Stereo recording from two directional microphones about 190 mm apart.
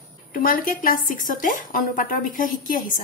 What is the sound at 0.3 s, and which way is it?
A woman's voice, 45° left (ahead or behind).